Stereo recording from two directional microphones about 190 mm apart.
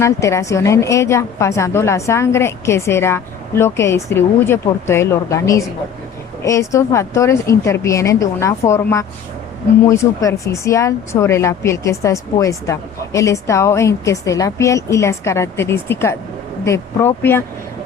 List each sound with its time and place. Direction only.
0.0 s speech: 15° left (ahead or behind)